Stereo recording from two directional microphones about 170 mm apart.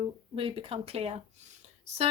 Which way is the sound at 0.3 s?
35° right (ahead or behind).